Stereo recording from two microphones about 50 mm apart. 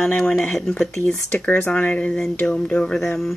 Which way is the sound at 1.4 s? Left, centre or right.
Left.